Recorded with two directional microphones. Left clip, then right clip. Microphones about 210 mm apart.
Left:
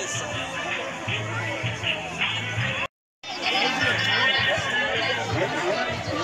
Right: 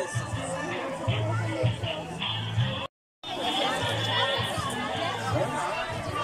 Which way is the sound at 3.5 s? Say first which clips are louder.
Left 6 dB; 25° right (ahead or behind).